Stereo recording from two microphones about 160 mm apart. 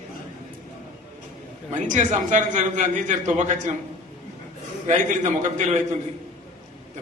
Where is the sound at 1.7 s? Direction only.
50° right (ahead or behind).